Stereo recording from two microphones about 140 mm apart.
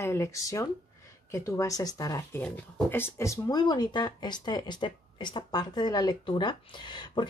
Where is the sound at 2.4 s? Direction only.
15° left (ahead or behind).